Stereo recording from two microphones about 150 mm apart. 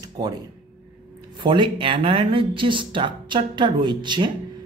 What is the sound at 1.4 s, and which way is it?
Speech, 30° right (ahead or behind).